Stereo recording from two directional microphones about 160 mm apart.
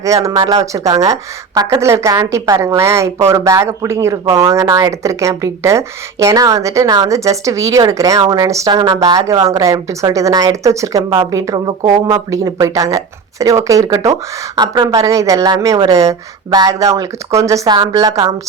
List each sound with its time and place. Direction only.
0.0 s a woman's voice: 20° right (ahead or behind)
12.0 s a woman's voice: 20° right (ahead or behind)